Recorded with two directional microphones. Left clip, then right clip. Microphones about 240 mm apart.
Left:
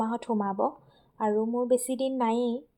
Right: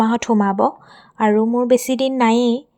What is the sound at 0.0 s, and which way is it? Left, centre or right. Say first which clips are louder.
A woman's voice: right 12 dB; right.